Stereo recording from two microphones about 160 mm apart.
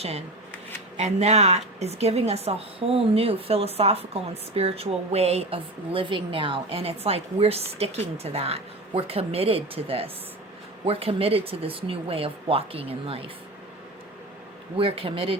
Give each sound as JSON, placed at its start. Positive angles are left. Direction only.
{"t": 0.9, "sound": "a woman's voice", "side_deg": -45}
{"t": 14.8, "sound": "a woman's voice", "side_deg": -35}